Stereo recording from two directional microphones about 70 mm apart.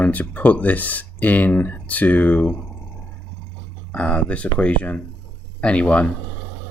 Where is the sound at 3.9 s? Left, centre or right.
Centre.